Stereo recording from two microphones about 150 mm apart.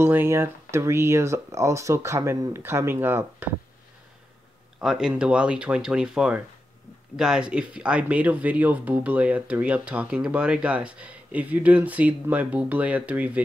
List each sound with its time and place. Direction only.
0.0 s speech: 15° right (ahead or behind)
4.7 s speech: 5° right (ahead or behind)